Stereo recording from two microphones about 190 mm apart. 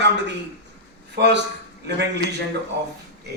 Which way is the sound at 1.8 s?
65° right (ahead or behind).